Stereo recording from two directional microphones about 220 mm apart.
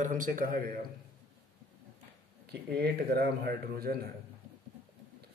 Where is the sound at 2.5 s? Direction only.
45° right (ahead or behind).